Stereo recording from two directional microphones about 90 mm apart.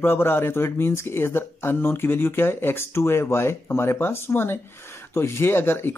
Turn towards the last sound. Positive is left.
turn(degrees=25)  # may be behind; listen again after turning